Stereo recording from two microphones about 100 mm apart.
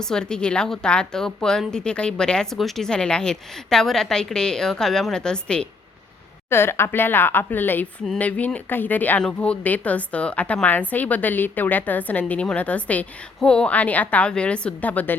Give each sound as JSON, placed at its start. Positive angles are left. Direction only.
{"t": 0.0, "sound": "a woman's voice", "side_deg": 5}
{"t": 6.5, "sound": "a woman's voice", "side_deg": 25}